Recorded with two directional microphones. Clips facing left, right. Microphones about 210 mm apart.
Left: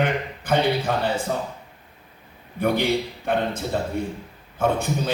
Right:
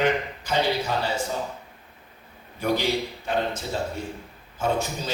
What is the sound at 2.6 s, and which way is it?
A man's voice, 55° left (ahead or behind).